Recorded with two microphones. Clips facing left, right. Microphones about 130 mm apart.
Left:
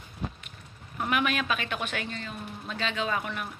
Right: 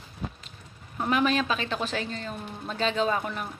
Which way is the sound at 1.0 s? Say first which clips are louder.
Right 3 dB; 30° right (ahead or behind).